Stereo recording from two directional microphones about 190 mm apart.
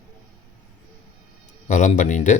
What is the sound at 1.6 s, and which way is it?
Speech, 40° left (ahead or behind).